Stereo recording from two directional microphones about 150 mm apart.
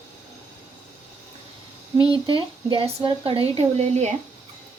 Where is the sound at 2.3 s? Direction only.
35° right (ahead or behind).